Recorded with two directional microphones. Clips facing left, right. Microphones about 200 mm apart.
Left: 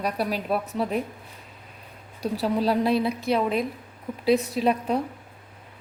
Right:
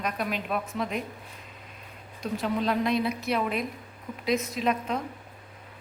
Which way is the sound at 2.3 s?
35° left (ahead or behind).